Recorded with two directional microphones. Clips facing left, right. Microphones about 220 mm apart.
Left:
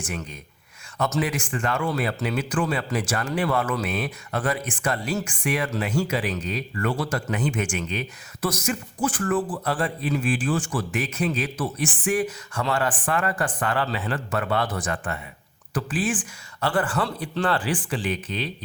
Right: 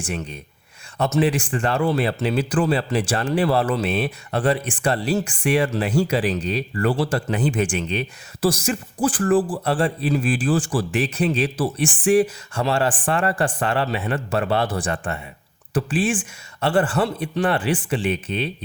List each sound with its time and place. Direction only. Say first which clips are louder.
0.0 s a man's voice: right 4 dB; 30° right (ahead or behind)